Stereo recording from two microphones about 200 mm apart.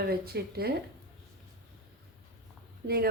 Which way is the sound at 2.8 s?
45° right (ahead or behind).